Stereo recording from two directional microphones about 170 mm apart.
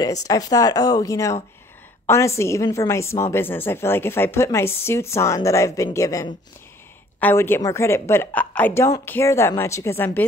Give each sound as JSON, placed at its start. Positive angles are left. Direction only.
{"t": 0.0, "sound": "a woman's voice", "side_deg": 20}